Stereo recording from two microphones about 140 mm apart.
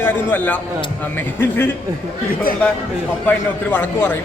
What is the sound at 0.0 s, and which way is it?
A man's voice, 15° left (ahead or behind).